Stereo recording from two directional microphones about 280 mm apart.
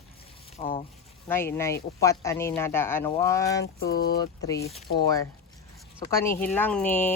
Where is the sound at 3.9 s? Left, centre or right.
Left.